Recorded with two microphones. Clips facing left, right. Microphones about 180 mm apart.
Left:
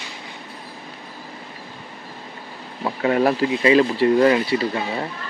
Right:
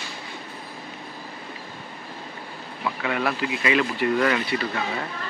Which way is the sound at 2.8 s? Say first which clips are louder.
Left 7 dB; 35° left (ahead or behind).